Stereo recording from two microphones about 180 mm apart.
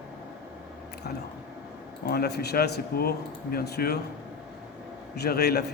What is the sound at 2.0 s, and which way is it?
Speech, 60° left (ahead or behind).